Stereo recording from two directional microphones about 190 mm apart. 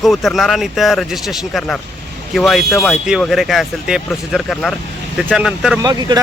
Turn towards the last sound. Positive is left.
turn(degrees=-20)  # may be behind; listen again after turning